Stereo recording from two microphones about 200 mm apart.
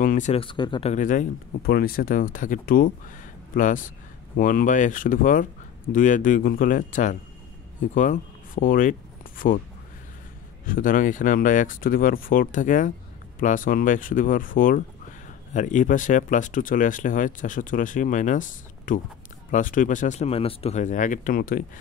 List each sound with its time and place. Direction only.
0.0 s speech: 40° left (ahead or behind); by 0.9 s 25° left (ahead or behind)
0.9 s speech: 40° left (ahead or behind)
10.6 s speech: 45° left (ahead or behind)